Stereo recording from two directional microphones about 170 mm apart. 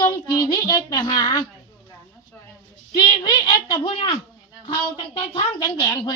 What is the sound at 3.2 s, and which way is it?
Speech, 25° left (ahead or behind).